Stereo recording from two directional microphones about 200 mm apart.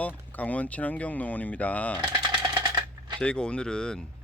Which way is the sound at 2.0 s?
20° right (ahead or behind).